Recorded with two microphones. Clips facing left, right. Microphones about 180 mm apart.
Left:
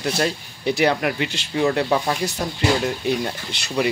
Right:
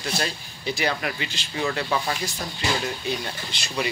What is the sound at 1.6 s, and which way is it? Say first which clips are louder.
Speech: left 6 dB; 45° left (ahead or behind).